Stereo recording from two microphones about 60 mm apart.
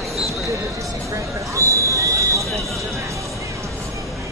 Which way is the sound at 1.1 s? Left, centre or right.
Right.